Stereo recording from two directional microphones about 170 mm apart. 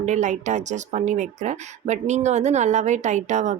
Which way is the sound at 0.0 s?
45° right (ahead or behind).